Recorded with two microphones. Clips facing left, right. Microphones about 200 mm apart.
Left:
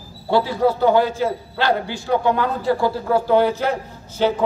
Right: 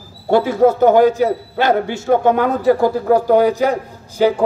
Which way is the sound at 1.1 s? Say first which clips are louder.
Right 5 dB; 20° right (ahead or behind).